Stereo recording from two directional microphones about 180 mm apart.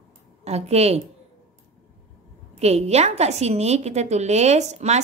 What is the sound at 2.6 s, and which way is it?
A woman's voice, 35° right (ahead or behind).